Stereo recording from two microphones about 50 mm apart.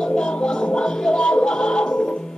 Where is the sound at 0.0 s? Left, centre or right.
Centre.